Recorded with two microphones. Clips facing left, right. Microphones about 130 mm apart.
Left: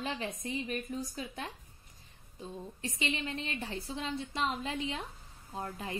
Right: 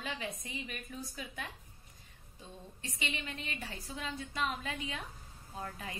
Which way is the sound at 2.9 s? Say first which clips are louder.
Left 5 dB; 30° left (ahead or behind).